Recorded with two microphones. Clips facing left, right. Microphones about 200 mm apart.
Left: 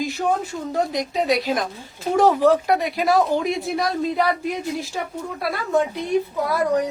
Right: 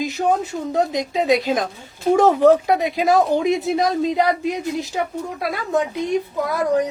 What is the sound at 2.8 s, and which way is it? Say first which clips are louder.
Speech: right 2 dB; 20° right (ahead or behind).